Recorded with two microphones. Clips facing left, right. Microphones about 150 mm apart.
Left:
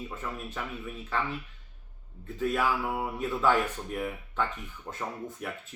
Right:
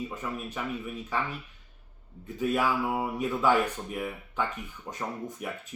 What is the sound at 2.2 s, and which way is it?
Speech, 10° right (ahead or behind).